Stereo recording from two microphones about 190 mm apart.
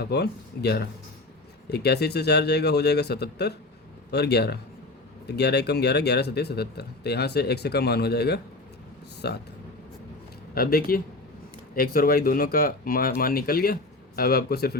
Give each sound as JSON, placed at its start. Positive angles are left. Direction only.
{"t": 0.0, "sound": "speech", "side_deg": 60}
{"t": 10.5, "sound": "speech", "side_deg": 50}